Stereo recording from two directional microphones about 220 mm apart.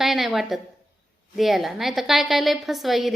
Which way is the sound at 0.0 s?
Centre (ahead or behind).